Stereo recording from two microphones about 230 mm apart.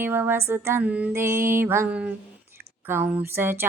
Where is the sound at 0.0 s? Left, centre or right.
Centre.